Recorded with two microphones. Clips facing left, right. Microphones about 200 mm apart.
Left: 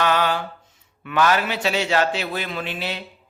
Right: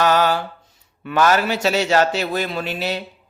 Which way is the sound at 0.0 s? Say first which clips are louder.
Right 4 dB; 40° right (ahead or behind).